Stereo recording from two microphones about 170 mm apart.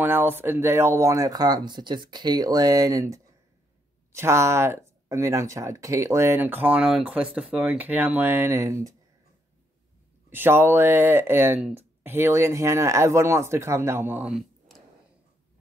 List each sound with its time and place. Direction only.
0.0 s speech: 10° right (ahead or behind)
10.3 s speech: 10° right (ahead or behind)